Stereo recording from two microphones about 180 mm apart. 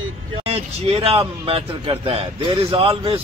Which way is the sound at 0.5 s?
35° right (ahead or behind).